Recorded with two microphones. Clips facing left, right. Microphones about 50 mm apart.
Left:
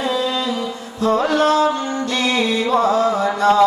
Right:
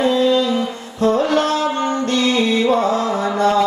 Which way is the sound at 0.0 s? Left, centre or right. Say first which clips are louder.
Right 5 dB; right.